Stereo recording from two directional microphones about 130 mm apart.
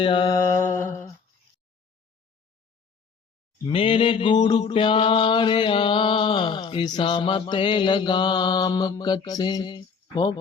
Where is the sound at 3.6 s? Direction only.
40° left (ahead or behind).